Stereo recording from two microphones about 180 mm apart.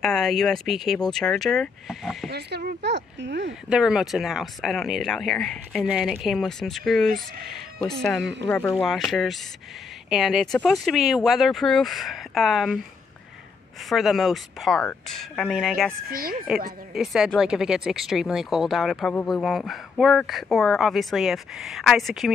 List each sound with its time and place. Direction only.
0.0 s speech: centre (ahead or behind)
2.3 s speech: 65° right (ahead or behind)
3.6 s speech: 5° right (ahead or behind)
13.8 s speech: centre (ahead or behind)
16.1 s speech: 50° right (ahead or behind)
16.9 s speech: centre (ahead or behind)